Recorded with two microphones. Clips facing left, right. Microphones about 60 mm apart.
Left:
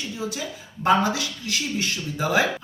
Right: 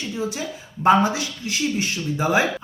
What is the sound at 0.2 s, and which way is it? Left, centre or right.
A woman's voice, right.